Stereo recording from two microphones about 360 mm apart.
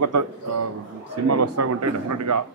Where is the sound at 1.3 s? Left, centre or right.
Right.